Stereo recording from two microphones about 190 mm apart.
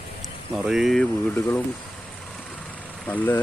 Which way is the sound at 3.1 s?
10° left (ahead or behind).